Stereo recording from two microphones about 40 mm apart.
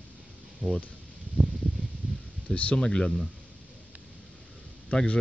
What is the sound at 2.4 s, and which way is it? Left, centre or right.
Speech, left.